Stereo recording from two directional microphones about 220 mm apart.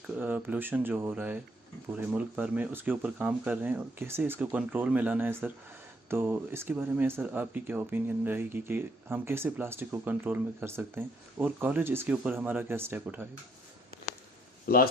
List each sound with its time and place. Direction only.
0.2 s speech: 10° right (ahead or behind)
14.7 s speech: 45° left (ahead or behind)